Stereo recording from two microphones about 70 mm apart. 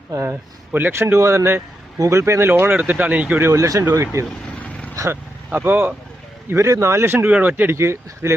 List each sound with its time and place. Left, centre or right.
0.1 s speech: right
0.7 s speech: right
2.5 s speech: right
3.3 s speech: right
5.5 s speech: right
6.5 s speech: right
7.8 s speech: right